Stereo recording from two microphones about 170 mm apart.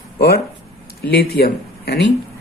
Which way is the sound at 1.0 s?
70° left (ahead or behind).